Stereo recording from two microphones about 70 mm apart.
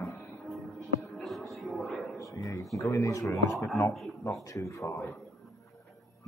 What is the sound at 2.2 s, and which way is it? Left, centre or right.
Speech, left.